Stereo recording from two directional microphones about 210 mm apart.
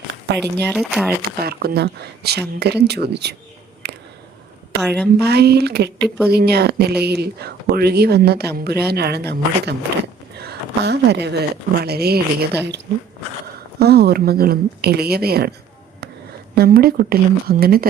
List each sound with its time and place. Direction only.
0.3 s speech: 50° right (ahead or behind)
0.7 s speech: centre (ahead or behind)
1.5 s speech: 50° right (ahead or behind)
3.8 s a sound: 50° right (ahead or behind)
4.8 s speech: 5° left (ahead or behind)
5.2 s speech: 50° right (ahead or behind)
16.6 s speech: 45° right (ahead or behind)